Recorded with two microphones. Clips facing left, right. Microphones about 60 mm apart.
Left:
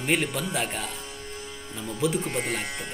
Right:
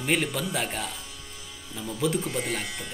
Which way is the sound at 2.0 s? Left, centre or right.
Centre.